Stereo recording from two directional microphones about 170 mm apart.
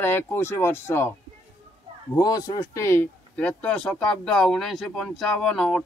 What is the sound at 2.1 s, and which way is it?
Speech, 25° left (ahead or behind).